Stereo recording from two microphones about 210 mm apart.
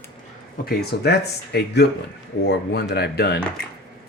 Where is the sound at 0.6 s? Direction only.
50° left (ahead or behind).